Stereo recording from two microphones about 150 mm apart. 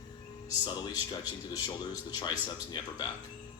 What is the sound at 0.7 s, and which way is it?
Speech, 30° left (ahead or behind).